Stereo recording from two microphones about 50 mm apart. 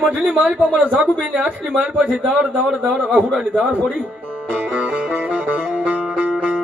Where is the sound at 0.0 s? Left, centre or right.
Right.